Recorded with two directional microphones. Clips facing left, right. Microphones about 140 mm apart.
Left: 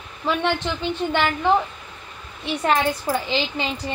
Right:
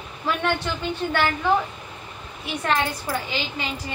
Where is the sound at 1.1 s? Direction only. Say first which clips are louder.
Left 1 dB; 20° left (ahead or behind).